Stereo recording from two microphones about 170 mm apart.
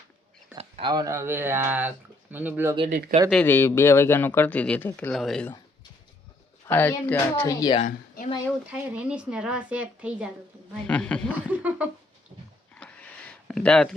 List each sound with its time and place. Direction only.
0.5 s speech: 30° right (ahead or behind); by 2.7 s 10° right (ahead or behind)
2.9 s speech: 55° right (ahead or behind)
3.4 s speech: 10° left (ahead or behind)
6.7 s speech: 10° left (ahead or behind)
7.6 s a woman's voice: 30° left (ahead or behind)
7.9 s a sound: 50° left (ahead or behind)
8.6 s speech: 10° right (ahead or behind)
10.8 s speech: 5° left (ahead or behind)
11.4 s speech: 10° right (ahead or behind)
12.7 s a sound: 10° left (ahead or behind)
13.5 s speech: 5° left (ahead or behind)